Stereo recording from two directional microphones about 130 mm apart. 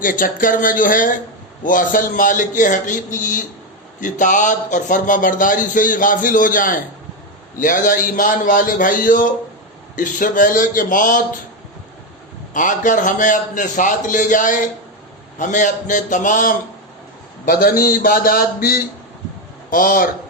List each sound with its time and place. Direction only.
0.0 s a man's voice: 90° left
12.5 s a man's voice: 85° left
19.7 s speech: 90° left